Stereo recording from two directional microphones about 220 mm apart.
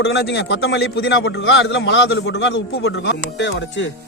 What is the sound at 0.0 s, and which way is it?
A man's voice, 50° left (ahead or behind).